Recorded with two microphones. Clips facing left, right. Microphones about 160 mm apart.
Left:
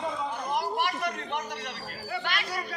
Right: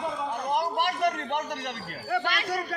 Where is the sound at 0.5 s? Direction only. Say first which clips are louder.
Right 2 dB; 60° right (ahead or behind).